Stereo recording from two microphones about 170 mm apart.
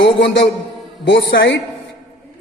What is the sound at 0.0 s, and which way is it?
A man's voice, 85° left.